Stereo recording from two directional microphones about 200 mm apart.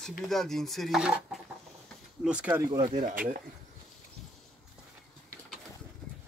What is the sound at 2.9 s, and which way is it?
Speech, 40° right (ahead or behind).